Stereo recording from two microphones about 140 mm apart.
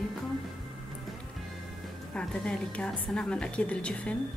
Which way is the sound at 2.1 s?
5° left (ahead or behind).